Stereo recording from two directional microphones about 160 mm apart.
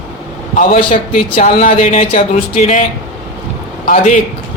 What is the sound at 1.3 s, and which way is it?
Speech, 55° left (ahead or behind).